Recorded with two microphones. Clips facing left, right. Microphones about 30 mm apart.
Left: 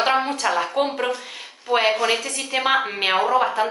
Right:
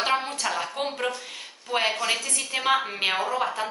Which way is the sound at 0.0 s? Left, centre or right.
Centre.